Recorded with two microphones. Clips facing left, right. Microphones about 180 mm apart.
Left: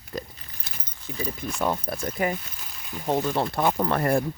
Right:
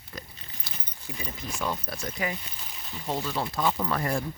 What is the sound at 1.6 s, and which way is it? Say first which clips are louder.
Speech: left 5 dB; 55° left (ahead or behind).